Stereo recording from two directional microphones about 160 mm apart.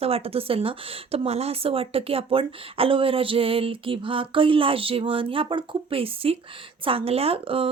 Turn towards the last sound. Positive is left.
turn(degrees=-35)  # may be behind; listen again after turning